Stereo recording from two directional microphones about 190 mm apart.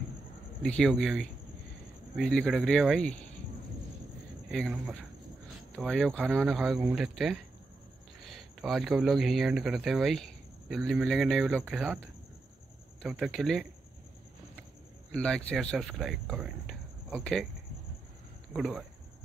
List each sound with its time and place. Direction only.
0.6 s speech: 5° left (ahead or behind)
4.5 s speech: centre (ahead or behind)
15.0 s speech: 5° left (ahead or behind)
18.5 s speech: centre (ahead or behind)